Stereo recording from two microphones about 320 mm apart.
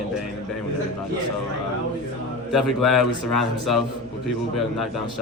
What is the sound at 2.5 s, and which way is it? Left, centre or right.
A man's voice, centre.